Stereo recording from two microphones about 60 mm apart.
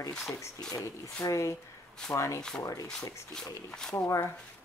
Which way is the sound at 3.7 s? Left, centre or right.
Centre.